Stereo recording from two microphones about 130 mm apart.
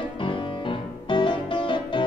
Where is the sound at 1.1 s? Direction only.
40° left (ahead or behind).